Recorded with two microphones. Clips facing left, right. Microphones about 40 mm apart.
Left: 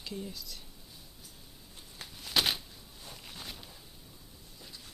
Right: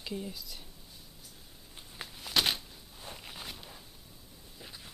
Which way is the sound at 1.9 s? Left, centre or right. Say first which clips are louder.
Even; centre.